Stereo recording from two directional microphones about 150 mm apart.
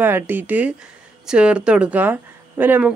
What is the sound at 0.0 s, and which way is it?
A woman's voice, 10° right (ahead or behind).